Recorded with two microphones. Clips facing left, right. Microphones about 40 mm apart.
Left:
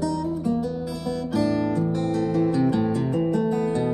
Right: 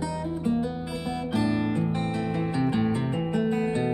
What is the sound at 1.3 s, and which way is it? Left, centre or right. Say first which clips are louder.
Music: left 3 dB; right.